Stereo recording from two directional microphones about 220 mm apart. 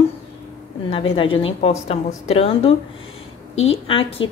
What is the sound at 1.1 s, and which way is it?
Speech, 25° left (ahead or behind).